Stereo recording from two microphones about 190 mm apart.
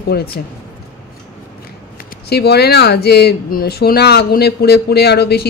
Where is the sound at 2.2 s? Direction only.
60° left (ahead or behind).